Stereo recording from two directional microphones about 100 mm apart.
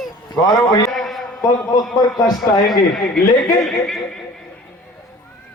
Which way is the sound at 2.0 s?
40° left (ahead or behind).